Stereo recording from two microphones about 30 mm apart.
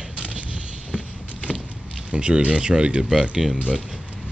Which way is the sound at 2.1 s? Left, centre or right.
Right.